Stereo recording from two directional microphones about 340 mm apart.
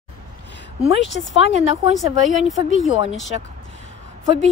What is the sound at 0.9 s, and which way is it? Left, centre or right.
Speech, left.